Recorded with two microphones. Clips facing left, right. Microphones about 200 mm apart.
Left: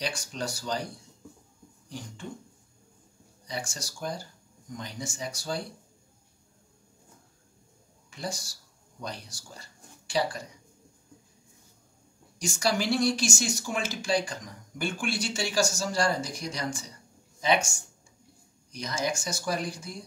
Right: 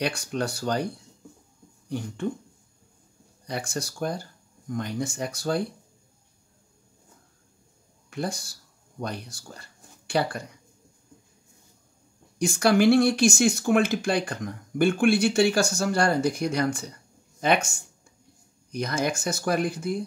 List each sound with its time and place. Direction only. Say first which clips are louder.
0.0 s speech: right 6 dB; 60° right (ahead or behind)
1.9 s speech: right 10 dB; 60° right (ahead or behind)
3.4 s speech: right 6 dB; 60° right (ahead or behind)
8.1 s speech: right 6 dB; 60° right (ahead or behind)
12.4 s speech: right 8 dB; 60° right (ahead or behind)